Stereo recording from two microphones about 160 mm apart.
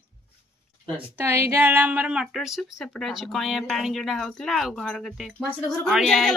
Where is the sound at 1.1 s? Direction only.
15° right (ahead or behind); by 6.3 s centre (ahead or behind).